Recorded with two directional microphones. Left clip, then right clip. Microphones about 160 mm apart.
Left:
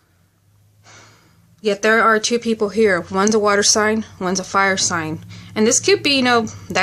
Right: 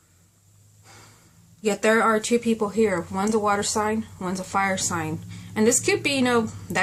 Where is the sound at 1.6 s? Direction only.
15° left (ahead or behind).